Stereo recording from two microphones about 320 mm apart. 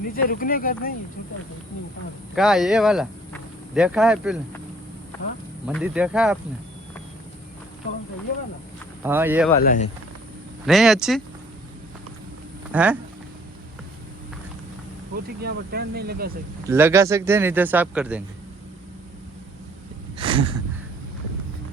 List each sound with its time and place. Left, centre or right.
0.1 s speech: left
2.3 s speech: centre
5.6 s speech: centre
9.0 s speech: centre
9.6 s speech: left
10.7 s speech: centre
12.7 s speech: centre
15.1 s speech: right
16.6 s speech: centre
20.1 s a sound: centre